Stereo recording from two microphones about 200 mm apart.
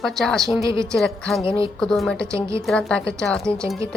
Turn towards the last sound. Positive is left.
turn(degrees=5)  # may be behind; listen again after turning